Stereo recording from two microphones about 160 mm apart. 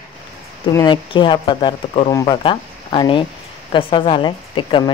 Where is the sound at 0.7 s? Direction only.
25° left (ahead or behind).